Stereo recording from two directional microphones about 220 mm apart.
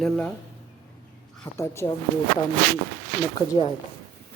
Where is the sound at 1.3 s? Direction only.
10° left (ahead or behind).